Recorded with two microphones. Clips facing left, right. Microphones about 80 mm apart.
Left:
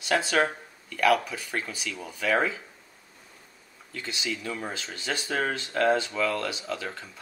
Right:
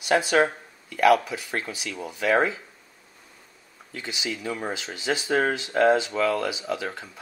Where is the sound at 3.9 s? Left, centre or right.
Centre.